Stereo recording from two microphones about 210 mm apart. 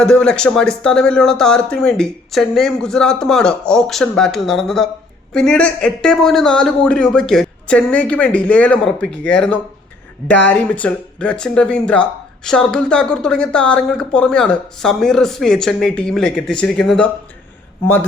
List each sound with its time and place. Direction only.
0.0 s speech: 5° left (ahead or behind)